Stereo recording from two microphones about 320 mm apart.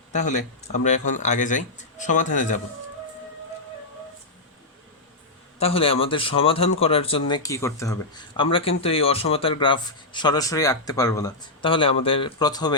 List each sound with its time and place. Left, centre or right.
0.1 s speech: left
5.5 s speech: centre